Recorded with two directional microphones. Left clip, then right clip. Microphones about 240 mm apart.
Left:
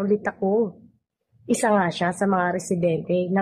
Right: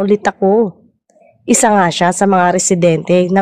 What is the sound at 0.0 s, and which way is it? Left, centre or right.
Speech, right.